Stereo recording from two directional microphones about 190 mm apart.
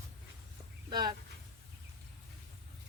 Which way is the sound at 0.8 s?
20° right (ahead or behind).